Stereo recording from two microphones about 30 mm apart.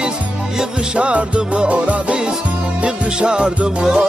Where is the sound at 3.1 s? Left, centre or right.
Right.